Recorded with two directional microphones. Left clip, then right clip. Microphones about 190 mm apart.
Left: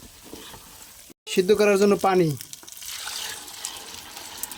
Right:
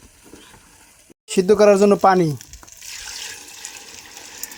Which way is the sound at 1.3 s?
20° right (ahead or behind).